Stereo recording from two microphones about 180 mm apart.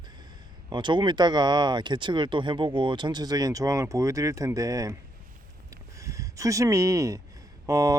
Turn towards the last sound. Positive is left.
turn(degrees=-20)  # may be behind; listen again after turning